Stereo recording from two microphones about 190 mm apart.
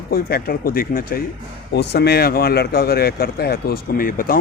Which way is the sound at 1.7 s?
60° left (ahead or behind).